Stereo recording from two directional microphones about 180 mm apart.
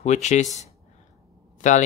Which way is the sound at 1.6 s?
45° left (ahead or behind).